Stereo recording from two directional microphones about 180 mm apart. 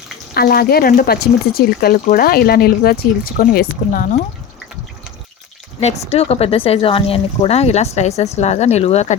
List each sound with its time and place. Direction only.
0.3 s speech: 55° left (ahead or behind)
5.8 s speech: 35° left (ahead or behind)